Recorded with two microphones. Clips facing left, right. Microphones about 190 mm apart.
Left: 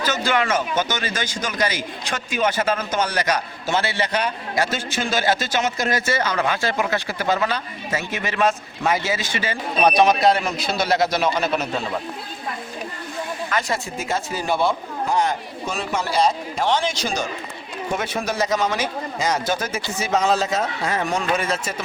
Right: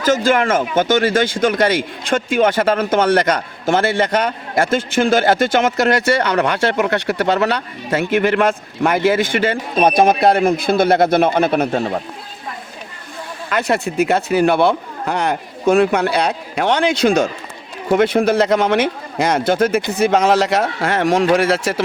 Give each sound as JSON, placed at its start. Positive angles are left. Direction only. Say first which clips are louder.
{"t": 0.0, "sound": "speech", "louder": "right 7 dB", "side_deg": -45}
{"t": 13.6, "sound": "speech", "louder": "right 13 dB", "side_deg": -60}
{"t": 20.0, "sound": "speech", "louder": "right 6 dB", "side_deg": -75}